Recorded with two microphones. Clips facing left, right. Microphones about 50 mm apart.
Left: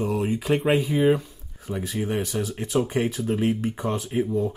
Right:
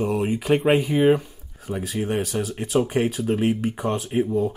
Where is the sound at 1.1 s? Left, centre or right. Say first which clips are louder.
Right 3 dB; centre.